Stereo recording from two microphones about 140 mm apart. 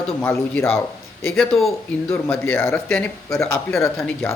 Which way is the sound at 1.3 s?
Centre (ahead or behind).